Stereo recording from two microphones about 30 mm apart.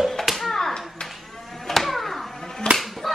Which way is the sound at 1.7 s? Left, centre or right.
Centre.